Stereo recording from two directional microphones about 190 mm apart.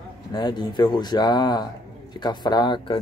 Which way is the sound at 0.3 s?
20° left (ahead or behind).